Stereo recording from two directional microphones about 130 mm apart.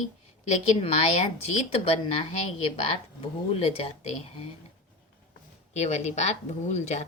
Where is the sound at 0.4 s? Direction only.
55° left (ahead or behind).